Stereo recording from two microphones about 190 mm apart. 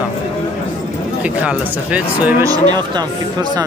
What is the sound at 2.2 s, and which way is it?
Speech, 15° right (ahead or behind).